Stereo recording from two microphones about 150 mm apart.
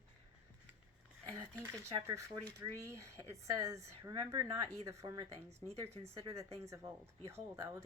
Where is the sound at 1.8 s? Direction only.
20° right (ahead or behind).